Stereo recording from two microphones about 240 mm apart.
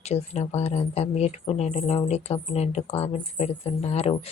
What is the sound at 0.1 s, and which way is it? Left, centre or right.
Speech, left.